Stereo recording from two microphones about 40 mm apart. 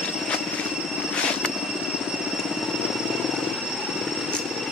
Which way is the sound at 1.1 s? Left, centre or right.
Left.